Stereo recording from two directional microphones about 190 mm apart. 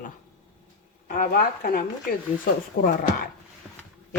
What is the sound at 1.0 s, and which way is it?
Speech, 45° left (ahead or behind).